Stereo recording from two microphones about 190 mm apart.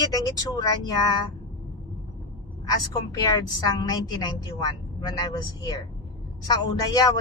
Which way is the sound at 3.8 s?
20° left (ahead or behind).